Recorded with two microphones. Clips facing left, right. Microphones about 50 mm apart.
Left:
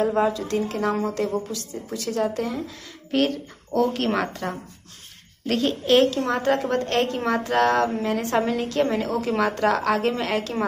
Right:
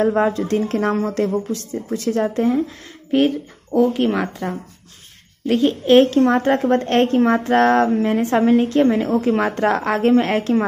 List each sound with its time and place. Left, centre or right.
0.1 s a woman's voice: right
0.4 s a woman's voice: right
3.1 s speech: centre
5.9 s a woman's voice: right